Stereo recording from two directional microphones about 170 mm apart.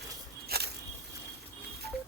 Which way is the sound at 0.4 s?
65° right (ahead or behind).